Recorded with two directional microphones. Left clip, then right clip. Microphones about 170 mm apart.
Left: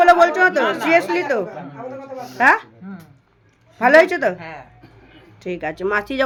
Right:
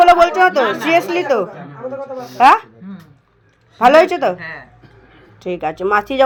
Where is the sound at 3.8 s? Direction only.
Centre (ahead or behind).